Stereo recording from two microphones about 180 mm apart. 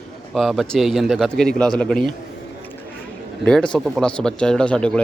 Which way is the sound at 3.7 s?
5° left (ahead or behind).